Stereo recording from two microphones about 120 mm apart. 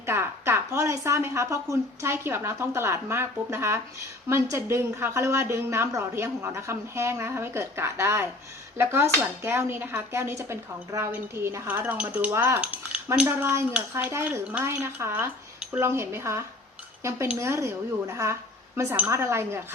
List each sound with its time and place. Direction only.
0.0 s a woman's voice: 20° right (ahead or behind)
13.2 s a woman's voice: 20° right (ahead or behind)
17.0 s cutlery: 25° right (ahead or behind)
17.3 s a woman's voice: 25° right (ahead or behind)